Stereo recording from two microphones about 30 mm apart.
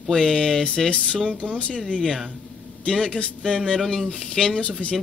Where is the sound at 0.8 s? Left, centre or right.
Left.